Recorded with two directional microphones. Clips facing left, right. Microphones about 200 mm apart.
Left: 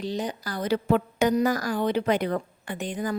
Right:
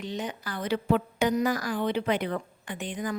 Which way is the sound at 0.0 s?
35° left (ahead or behind).